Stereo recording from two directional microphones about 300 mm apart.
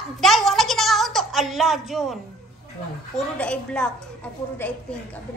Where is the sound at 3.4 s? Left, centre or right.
Centre.